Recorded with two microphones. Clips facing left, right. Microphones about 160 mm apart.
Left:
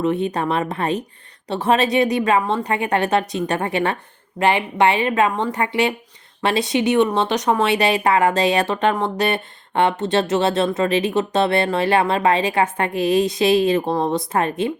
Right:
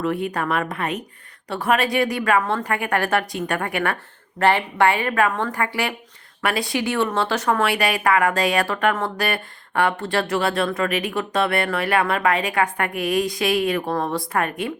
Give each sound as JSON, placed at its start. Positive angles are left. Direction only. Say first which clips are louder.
{"t": 0.0, "sound": "speech", "louder": "left 3 dB", "side_deg": 20}